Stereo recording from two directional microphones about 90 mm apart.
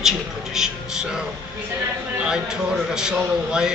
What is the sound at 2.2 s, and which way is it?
A man's voice, 10° right (ahead or behind).